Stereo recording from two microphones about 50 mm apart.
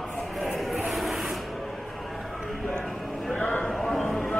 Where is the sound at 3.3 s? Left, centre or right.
Left.